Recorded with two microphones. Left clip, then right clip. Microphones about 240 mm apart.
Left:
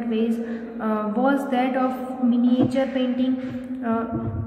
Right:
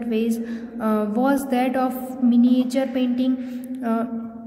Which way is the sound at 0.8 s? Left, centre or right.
Right.